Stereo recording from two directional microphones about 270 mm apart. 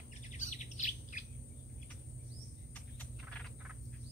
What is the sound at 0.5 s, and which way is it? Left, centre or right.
Bird, left.